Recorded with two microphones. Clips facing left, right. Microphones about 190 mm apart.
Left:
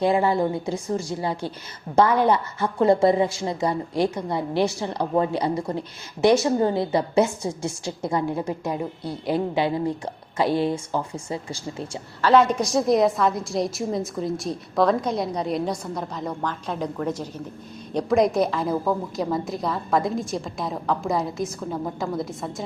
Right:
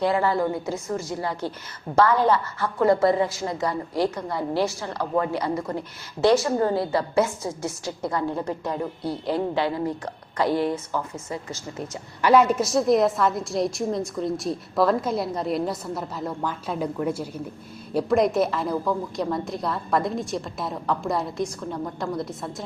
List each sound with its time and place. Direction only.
0.0 s a woman's voice: 20° left (ahead or behind)
0.9 s a woman's voice: 35° left (ahead or behind)
1.2 s a woman's voice: 20° left (ahead or behind)
12.2 s a woman's voice: 10° right (ahead or behind)